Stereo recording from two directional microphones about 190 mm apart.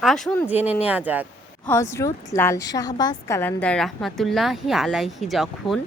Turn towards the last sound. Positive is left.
turn(degrees=0)  # may be behind; listen again after turning